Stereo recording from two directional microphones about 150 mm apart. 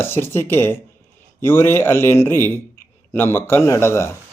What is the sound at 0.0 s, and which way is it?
A man's voice, 15° left (ahead or behind).